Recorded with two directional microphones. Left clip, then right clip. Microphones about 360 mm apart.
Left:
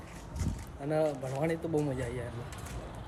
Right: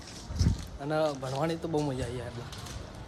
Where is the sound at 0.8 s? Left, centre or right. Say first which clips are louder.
Right 1 dB; centre.